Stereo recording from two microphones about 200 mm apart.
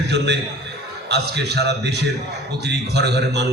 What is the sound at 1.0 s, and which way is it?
A man's voice, 55° right (ahead or behind).